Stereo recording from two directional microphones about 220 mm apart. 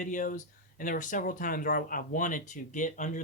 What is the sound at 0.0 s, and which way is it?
Speech, 35° left (ahead or behind).